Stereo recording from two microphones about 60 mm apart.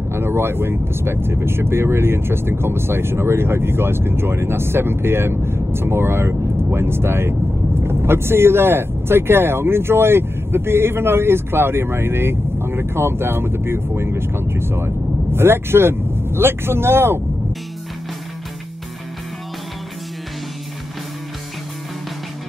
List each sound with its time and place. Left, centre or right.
0.1 s speech: right